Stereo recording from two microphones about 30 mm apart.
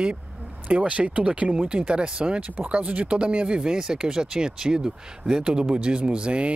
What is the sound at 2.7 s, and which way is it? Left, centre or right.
Speech, right.